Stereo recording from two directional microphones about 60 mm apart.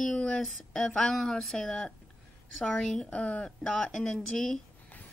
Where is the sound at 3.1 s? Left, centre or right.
Left; by 4.6 s centre.